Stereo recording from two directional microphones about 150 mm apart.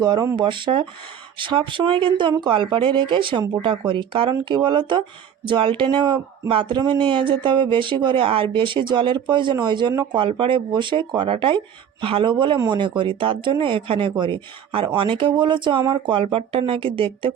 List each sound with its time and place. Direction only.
0.0 s speech: 25° right (ahead or behind)